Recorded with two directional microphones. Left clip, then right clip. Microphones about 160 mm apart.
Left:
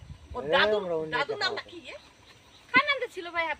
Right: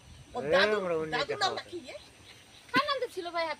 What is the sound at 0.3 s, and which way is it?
Speech, 15° left (ahead or behind).